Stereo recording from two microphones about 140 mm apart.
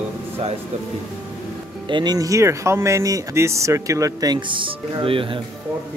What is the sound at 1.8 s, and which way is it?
Speech, 35° right (ahead or behind).